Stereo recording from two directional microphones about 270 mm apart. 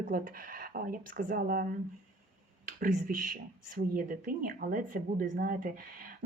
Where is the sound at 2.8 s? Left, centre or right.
Right.